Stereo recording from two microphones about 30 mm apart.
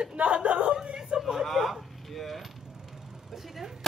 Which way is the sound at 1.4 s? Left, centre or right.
Centre.